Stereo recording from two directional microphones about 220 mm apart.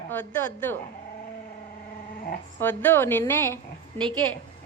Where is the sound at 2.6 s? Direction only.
10° left (ahead or behind).